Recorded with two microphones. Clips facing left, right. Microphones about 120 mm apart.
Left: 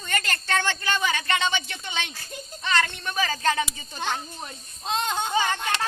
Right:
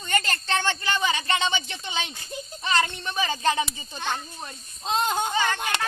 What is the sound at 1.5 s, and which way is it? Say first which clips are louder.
Speech: even; 25° right (ahead or behind).